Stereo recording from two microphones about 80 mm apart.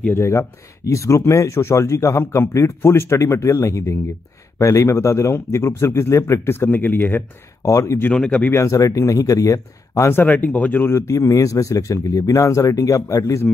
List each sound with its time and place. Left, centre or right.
0.1 s speech: left
7.6 s speech: left
8.1 s speech: centre
8.5 s speech: left
10.2 s speech: left